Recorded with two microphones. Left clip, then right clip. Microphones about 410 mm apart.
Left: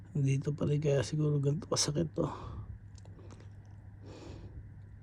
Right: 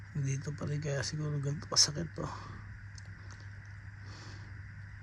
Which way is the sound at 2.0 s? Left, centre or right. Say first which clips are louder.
Left 6 dB; left.